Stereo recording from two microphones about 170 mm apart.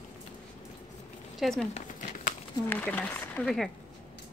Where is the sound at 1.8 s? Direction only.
50° left (ahead or behind).